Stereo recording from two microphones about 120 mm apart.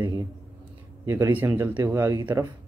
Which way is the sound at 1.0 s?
20° right (ahead or behind).